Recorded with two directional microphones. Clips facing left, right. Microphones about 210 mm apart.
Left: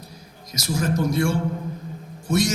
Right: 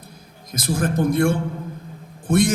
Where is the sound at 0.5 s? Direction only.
55° right (ahead or behind).